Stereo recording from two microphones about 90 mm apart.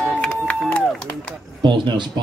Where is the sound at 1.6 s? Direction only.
60° right (ahead or behind).